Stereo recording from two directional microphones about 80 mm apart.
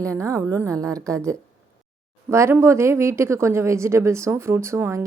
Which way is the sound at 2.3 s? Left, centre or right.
Right.